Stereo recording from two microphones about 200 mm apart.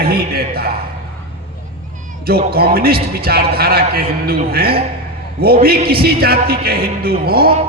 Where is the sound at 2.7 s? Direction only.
50° right (ahead or behind).